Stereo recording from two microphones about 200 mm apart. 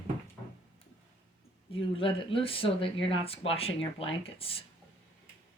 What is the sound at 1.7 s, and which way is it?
Speech, 25° left (ahead or behind).